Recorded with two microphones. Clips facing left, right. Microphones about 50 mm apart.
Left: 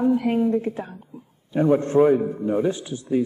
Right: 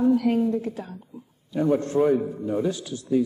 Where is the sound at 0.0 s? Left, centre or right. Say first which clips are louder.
Even; left.